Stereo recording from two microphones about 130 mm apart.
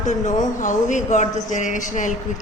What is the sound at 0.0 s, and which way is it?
A woman's voice, 70° left (ahead or behind).